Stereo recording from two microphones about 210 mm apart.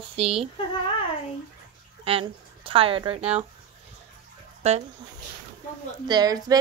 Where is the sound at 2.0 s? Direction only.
25° right (ahead or behind).